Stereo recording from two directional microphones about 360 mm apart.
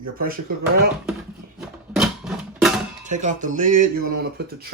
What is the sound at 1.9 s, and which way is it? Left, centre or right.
Music, centre.